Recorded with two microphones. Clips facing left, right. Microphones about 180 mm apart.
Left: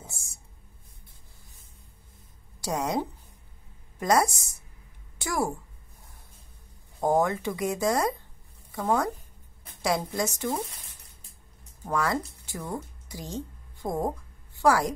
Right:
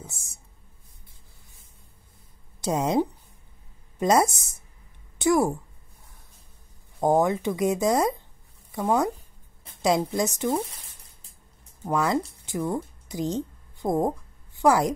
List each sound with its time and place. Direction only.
0.0 s a sound: 20° right (ahead or behind)
2.6 s a woman's voice: 20° right (ahead or behind)
7.0 s a woman's voice: 20° right (ahead or behind)
11.9 s a woman's voice: 20° right (ahead or behind)